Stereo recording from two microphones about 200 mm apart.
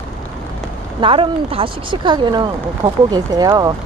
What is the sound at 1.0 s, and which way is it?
Speech, 25° right (ahead or behind).